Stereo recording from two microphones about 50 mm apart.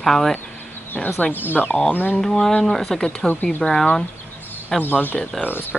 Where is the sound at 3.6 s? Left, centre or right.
Left.